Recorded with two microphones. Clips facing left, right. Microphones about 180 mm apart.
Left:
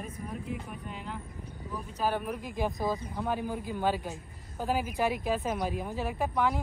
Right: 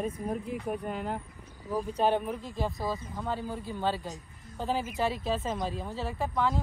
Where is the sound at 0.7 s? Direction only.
50° right (ahead or behind).